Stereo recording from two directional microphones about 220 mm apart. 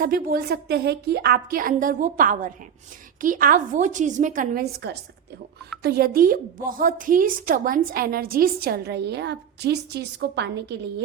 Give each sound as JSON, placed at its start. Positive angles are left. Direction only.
{"t": 0.0, "sound": "a woman's voice", "side_deg": -40}